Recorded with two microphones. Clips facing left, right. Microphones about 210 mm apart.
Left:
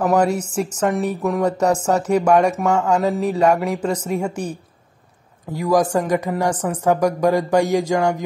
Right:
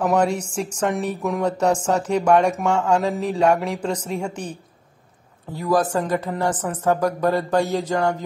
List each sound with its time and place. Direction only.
0.0 s speech: 5° left (ahead or behind)